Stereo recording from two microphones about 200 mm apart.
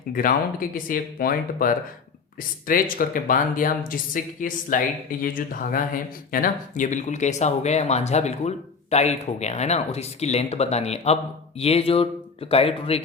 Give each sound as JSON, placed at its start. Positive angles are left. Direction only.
{"t": 0.1, "sound": "speech", "side_deg": 45}
{"t": 2.9, "sound": "speech", "side_deg": 45}